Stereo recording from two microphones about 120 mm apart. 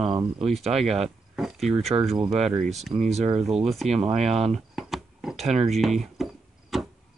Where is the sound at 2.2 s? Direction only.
65° right (ahead or behind).